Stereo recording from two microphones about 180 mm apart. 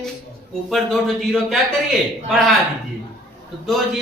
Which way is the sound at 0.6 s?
Centre (ahead or behind).